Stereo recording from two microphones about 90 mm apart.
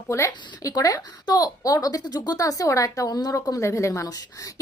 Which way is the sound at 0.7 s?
45° left (ahead or behind).